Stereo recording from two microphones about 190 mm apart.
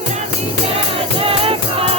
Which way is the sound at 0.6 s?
30° right (ahead or behind).